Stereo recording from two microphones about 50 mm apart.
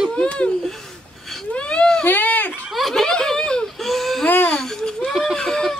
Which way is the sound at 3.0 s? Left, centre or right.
Centre.